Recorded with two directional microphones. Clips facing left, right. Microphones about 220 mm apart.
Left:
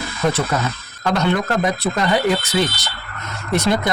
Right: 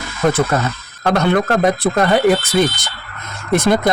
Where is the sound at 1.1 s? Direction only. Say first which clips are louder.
Right 4 dB; 55° right (ahead or behind).